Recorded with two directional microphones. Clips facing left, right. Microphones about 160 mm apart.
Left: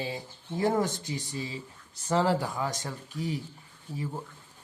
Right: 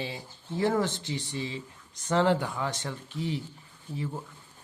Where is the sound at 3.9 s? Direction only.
10° left (ahead or behind).